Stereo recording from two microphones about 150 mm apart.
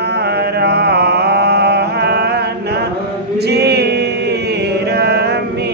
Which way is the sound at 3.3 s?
90° right.